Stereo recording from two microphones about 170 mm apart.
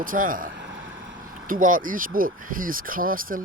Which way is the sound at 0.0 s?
55° right (ahead or behind).